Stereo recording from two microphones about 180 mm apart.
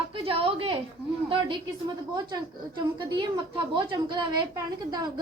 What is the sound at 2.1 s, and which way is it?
A woman's voice, 25° right (ahead or behind).